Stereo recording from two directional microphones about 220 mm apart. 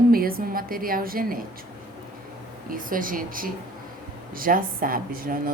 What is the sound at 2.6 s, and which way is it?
A woman's voice, 40° right (ahead or behind).